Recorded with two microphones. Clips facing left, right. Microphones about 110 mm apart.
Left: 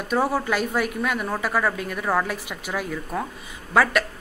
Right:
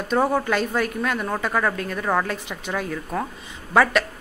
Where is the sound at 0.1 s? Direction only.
5° left (ahead or behind).